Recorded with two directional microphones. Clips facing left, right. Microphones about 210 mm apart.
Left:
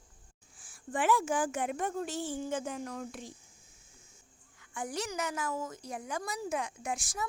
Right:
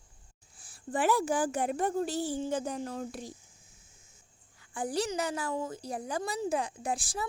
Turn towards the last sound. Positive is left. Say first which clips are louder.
# right 3 dB
turn(degrees=-30)  # may be behind; listen again after turning